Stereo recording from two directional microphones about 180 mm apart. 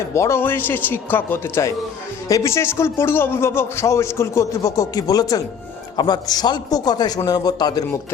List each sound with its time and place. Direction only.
0.1 s a man's voice: 15° left (ahead or behind)